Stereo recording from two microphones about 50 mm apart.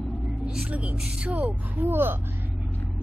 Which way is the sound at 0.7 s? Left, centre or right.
Right.